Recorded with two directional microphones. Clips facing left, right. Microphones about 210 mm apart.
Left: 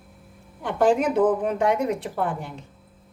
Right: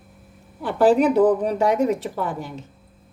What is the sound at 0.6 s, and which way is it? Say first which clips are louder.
Speech: right 4 dB; 35° right (ahead or behind).